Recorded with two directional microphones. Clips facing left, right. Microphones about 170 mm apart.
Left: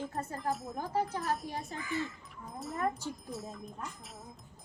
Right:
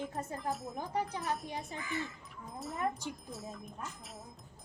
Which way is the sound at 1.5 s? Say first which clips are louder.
Left 2 dB; 20° right (ahead or behind).